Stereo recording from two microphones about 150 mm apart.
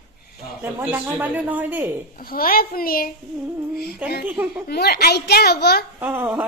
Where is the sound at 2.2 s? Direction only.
75° left (ahead or behind).